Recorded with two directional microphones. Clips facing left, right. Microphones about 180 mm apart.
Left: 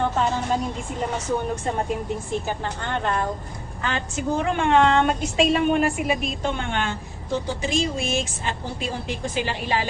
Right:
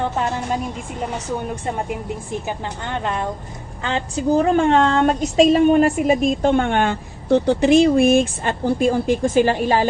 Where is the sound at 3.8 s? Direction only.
25° right (ahead or behind).